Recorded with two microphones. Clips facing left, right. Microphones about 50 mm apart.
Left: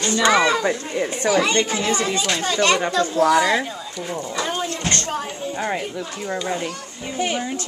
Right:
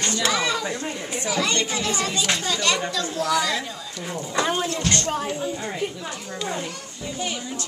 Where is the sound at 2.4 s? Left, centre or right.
Left.